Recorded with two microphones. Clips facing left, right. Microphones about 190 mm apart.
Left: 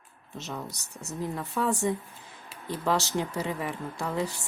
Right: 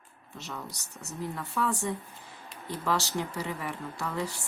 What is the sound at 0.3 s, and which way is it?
Speech, 20° left (ahead or behind).